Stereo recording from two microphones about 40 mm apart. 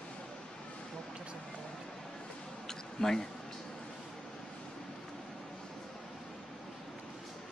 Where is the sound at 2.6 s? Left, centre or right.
Centre.